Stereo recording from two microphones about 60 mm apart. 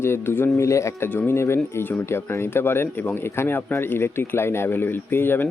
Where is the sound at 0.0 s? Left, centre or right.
Left.